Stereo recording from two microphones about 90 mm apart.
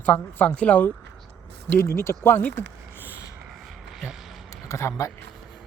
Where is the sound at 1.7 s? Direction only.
30° left (ahead or behind).